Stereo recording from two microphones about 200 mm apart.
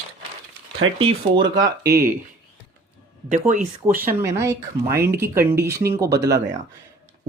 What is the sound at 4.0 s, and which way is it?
Speech, 10° right (ahead or behind).